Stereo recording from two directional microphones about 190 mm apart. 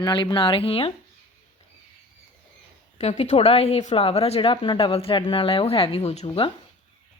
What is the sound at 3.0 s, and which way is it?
A woman's voice, 35° left (ahead or behind).